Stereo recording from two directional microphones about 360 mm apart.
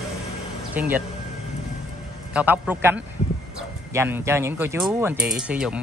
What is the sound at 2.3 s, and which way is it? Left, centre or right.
Speech, centre.